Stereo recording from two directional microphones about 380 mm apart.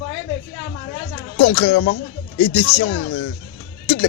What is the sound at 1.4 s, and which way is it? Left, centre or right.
Speech, left.